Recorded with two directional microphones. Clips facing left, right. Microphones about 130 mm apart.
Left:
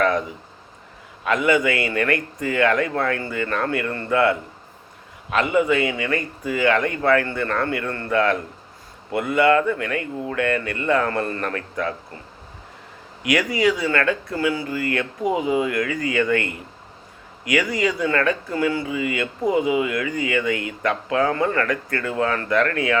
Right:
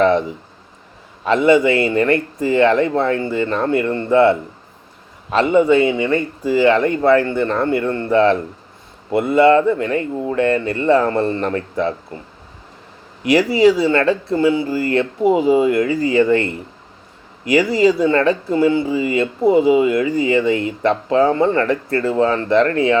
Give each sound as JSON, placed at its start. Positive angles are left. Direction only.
{"t": 0.0, "sound": "a sound", "side_deg": -25}
{"t": 1.2, "sound": "a man's voice", "side_deg": -30}
{"t": 13.2, "sound": "speech", "side_deg": -30}